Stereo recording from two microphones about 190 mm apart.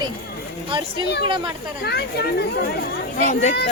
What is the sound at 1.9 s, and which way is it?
Speech, 60° left (ahead or behind).